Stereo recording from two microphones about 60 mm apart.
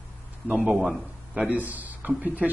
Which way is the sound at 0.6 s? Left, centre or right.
Centre.